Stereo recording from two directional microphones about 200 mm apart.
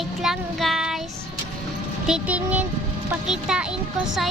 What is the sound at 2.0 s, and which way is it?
Speech, 5° right (ahead or behind).